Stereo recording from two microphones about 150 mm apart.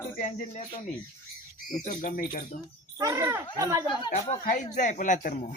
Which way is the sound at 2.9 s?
20° right (ahead or behind).